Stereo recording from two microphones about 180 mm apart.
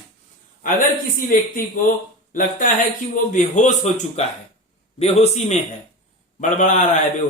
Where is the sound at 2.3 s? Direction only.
50° left (ahead or behind).